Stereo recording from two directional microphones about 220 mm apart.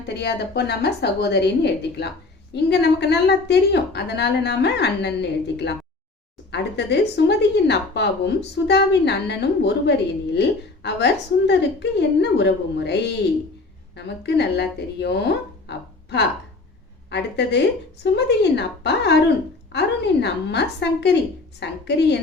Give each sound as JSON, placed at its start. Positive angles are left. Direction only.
{"t": 0.1, "sound": "speech", "side_deg": 50}